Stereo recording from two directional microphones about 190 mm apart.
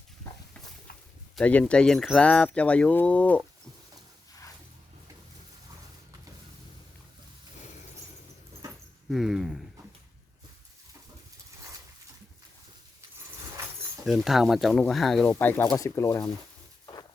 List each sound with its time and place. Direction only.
1.4 s speech: 5° left (ahead or behind)
9.0 s speech: centre (ahead or behind)
14.0 s speech: centre (ahead or behind); by 16.3 s 15° left (ahead or behind)
16.8 s a sound: 20° left (ahead or behind)